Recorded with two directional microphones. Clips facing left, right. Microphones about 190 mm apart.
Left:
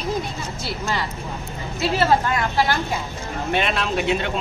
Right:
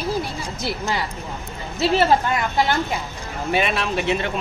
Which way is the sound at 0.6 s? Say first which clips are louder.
Right 2 dB; 15° right (ahead or behind).